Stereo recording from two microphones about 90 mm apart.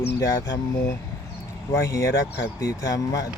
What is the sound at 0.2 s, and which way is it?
Speech, 40° left (ahead or behind).